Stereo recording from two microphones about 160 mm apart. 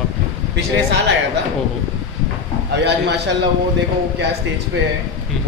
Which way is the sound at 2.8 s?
90° right.